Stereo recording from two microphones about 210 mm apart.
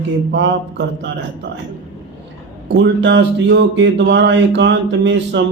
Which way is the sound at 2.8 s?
60° right (ahead or behind).